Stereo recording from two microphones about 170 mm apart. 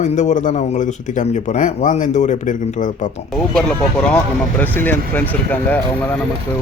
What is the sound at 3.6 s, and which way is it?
Speech, 5° left (ahead or behind).